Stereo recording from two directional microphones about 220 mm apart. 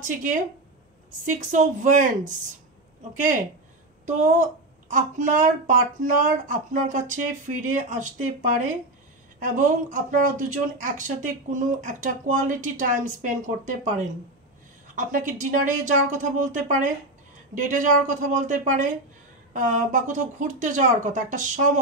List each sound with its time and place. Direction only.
0.0 s a woman's voice: 35° right (ahead or behind)